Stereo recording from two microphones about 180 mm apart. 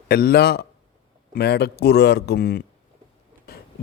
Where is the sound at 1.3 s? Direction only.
65° left (ahead or behind).